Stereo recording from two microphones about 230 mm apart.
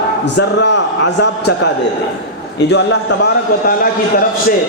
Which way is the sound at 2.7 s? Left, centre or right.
Left.